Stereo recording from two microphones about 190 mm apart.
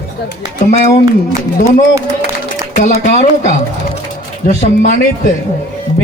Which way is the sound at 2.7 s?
40° left (ahead or behind).